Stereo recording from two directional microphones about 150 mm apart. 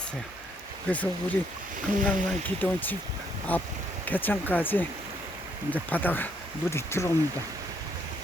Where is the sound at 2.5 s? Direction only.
10° left (ahead or behind).